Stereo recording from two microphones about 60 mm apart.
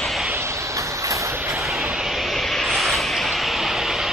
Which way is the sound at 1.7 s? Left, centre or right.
Centre.